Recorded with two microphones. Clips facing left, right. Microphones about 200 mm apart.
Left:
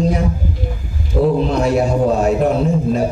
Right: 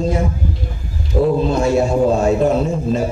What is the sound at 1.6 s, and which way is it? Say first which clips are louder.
A man's voice: right 1 dB; 25° right (ahead or behind).